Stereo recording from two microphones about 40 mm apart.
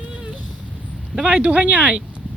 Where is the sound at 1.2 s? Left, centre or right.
Right.